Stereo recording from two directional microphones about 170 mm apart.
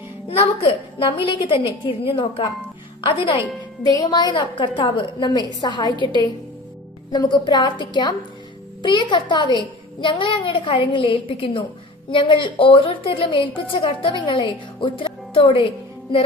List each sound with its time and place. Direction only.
0.3 s a woman's voice: 35° left (ahead or behind)
7.1 s a woman's voice: 25° left (ahead or behind)